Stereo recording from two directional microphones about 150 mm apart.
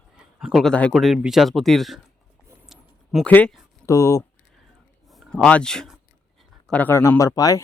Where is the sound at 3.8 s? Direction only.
20° left (ahead or behind).